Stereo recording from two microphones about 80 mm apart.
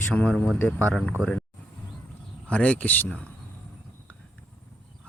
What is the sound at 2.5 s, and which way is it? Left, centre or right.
Speech, centre.